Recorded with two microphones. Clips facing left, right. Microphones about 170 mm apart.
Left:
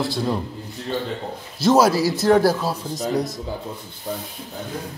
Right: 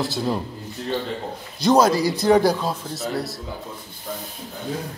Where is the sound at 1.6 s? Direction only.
5° left (ahead or behind).